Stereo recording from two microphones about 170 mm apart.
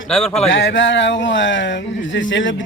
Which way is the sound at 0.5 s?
90° left.